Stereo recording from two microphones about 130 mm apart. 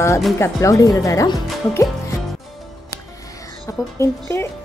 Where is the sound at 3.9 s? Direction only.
20° left (ahead or behind).